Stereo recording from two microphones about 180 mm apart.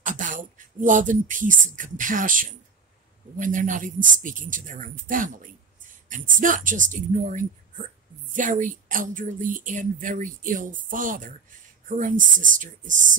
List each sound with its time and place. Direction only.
0.0 s speech: 45° right (ahead or behind)